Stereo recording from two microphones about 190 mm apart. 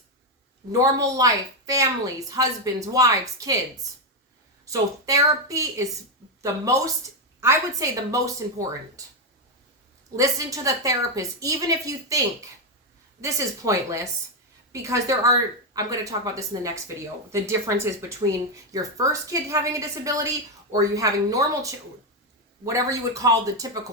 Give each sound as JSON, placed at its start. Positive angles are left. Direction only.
{"t": 0.7, "sound": "a woman's voice", "side_deg": -15}
{"t": 4.6, "sound": "a woman's voice", "side_deg": -15}
{"t": 10.2, "sound": "a woman's voice", "side_deg": -15}